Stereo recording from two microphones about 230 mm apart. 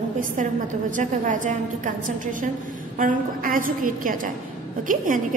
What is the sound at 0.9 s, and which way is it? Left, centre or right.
Speech, right.